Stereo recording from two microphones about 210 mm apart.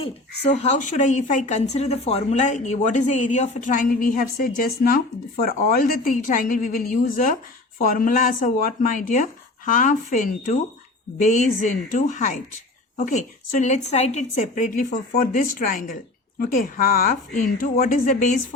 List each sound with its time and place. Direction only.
0.0 s speech: 30° left (ahead or behind)